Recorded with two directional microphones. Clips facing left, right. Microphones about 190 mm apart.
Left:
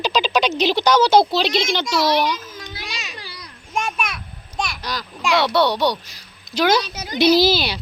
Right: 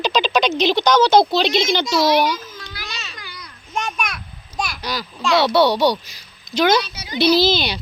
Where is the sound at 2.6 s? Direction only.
15° left (ahead or behind).